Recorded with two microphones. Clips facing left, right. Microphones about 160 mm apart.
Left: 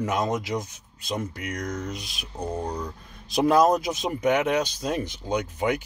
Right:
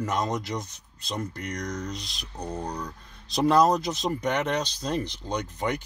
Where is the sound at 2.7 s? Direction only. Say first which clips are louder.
Left 3 dB; 25° left (ahead or behind).